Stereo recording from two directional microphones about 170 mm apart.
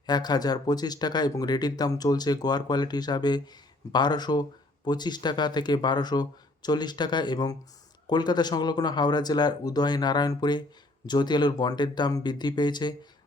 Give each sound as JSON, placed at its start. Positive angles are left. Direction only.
{"t": 0.0, "sound": "speech", "side_deg": 25}